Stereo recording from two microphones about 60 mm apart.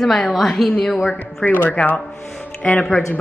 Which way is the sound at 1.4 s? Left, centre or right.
Left.